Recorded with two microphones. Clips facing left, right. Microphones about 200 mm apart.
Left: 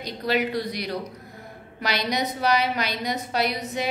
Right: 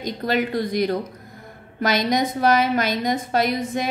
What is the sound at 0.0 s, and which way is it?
A woman's voice, 50° right (ahead or behind).